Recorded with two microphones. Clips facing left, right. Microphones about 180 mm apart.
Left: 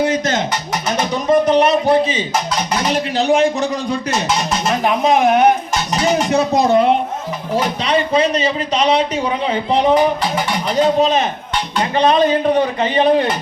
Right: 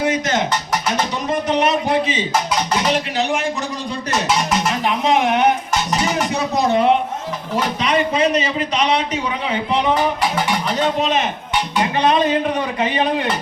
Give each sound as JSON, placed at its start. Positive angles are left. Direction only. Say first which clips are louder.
{"t": 1.3, "sound": "a man's voice", "louder": "left 7 dB", "side_deg": 35}
{"t": 4.8, "sound": "speech", "louder": "left 5 dB", "side_deg": 45}
{"t": 6.5, "sound": "a man's voice", "louder": "left 1 dB", "side_deg": 35}